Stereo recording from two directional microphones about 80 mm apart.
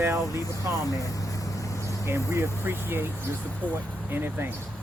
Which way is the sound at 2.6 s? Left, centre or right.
Right.